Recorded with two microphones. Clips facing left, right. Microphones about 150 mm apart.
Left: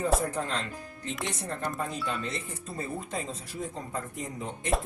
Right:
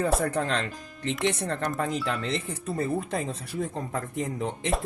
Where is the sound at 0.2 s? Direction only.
70° right (ahead or behind).